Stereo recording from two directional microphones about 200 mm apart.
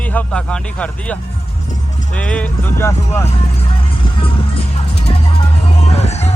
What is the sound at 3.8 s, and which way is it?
Music, 25° left (ahead or behind).